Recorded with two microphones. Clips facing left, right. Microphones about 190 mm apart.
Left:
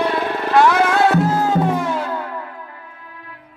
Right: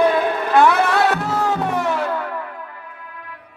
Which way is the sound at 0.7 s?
65° right (ahead or behind).